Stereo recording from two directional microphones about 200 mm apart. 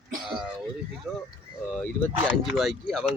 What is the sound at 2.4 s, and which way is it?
Speech, centre (ahead or behind).